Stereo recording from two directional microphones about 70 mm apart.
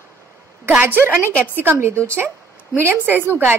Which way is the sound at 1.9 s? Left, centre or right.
Right.